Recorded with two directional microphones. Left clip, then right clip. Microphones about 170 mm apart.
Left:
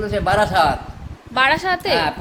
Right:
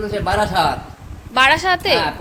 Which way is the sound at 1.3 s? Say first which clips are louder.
Right 3 dB; 5° right (ahead or behind).